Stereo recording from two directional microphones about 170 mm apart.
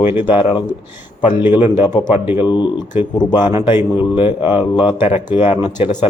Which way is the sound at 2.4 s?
25° left (ahead or behind).